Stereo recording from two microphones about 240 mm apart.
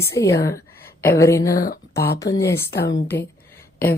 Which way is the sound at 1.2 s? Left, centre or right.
Centre.